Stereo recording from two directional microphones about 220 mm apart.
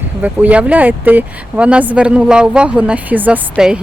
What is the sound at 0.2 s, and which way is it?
Speech, 5° right (ahead or behind).